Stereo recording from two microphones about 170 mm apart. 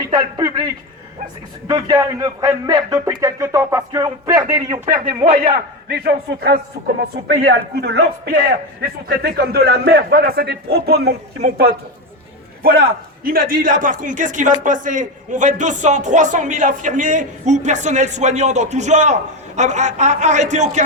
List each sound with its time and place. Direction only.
0.1 s speech: 25° right (ahead or behind)
5.9 s a man's voice: 70° right (ahead or behind)
7.5 s a man's voice: 85° right; by 20.8 s 45° right (ahead or behind)